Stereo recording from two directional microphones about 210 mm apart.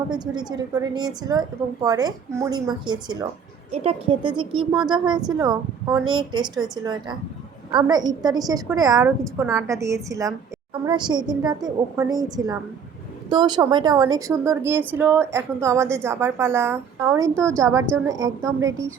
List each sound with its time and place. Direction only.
0.1 s a woman's voice: 20° right (ahead or behind)
7.7 s a woman's voice: 20° right (ahead or behind)